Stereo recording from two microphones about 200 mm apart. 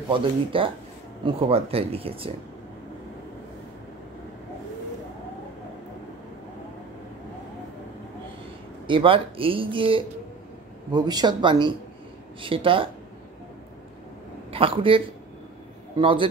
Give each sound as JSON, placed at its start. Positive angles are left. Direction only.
{"t": 0.1, "sound": "speech", "side_deg": -25}
{"t": 8.8, "sound": "speech", "side_deg": -25}
{"t": 14.5, "sound": "speech", "side_deg": -25}